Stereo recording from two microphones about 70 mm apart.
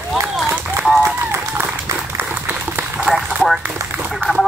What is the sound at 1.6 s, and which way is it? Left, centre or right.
Applause, right.